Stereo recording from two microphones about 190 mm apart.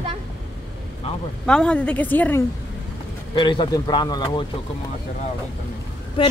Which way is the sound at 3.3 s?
25° left (ahead or behind).